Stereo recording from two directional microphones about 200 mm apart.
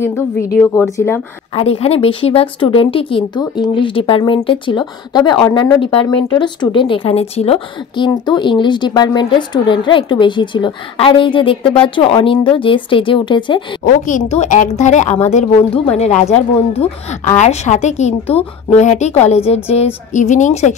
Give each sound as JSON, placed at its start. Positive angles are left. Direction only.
{"t": 0.6, "sound": "speech", "side_deg": 5}
{"t": 1.5, "sound": "a woman's voice", "side_deg": 30}
{"t": 13.8, "sound": "speech", "side_deg": 40}